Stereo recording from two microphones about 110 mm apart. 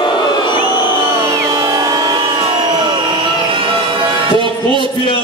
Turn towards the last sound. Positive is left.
turn(degrees=-50)  # may be behind; listen again after turning